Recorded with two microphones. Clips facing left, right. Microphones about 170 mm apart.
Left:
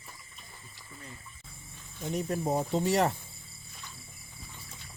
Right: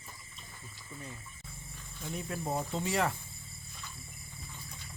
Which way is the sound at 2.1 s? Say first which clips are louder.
Left 6 dB; 40° left (ahead or behind).